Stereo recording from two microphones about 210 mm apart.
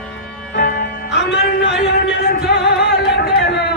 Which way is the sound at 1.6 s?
55° left (ahead or behind).